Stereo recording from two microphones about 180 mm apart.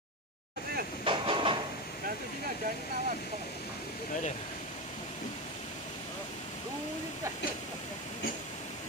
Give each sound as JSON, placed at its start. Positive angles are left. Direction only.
{"t": 1.0, "sound": "vehicle", "side_deg": -30}